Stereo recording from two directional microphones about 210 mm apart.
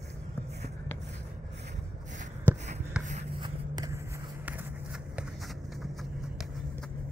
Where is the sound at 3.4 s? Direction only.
15° right (ahead or behind).